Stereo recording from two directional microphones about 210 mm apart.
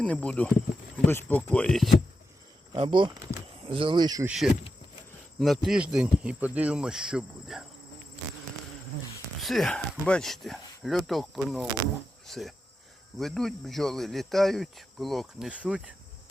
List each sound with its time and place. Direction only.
0.0 s speech: 5° left (ahead or behind)
2.7 s speech: 25° right (ahead or behind)
5.4 s speech: centre (ahead or behind)
9.4 s speech: centre (ahead or behind)